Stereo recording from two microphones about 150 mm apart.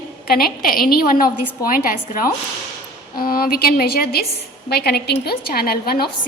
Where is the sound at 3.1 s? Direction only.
85° left.